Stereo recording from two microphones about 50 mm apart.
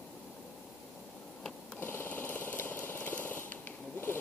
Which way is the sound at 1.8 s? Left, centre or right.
Left.